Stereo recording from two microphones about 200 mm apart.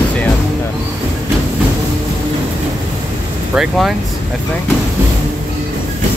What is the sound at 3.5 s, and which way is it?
Speech, centre (ahead or behind).